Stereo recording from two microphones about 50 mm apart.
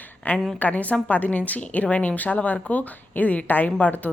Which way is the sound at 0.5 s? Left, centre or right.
Left.